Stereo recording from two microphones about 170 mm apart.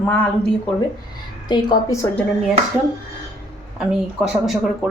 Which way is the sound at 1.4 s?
25° left (ahead or behind).